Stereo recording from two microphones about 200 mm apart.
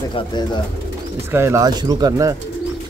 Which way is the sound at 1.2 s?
10° right (ahead or behind).